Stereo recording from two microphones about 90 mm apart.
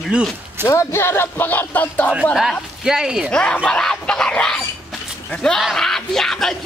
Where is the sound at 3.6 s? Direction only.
10° left (ahead or behind).